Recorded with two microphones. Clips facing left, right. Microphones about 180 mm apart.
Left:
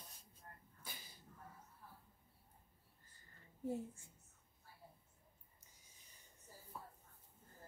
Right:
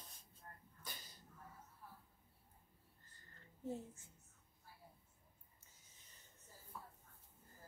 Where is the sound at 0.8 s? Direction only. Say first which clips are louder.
Right 1 dB; 10° left (ahead or behind).